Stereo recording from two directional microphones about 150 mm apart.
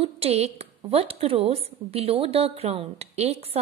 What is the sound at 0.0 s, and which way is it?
A woman's voice, 40° right (ahead or behind).